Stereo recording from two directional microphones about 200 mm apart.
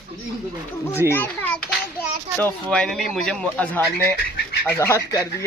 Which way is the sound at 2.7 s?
Centre (ahead or behind).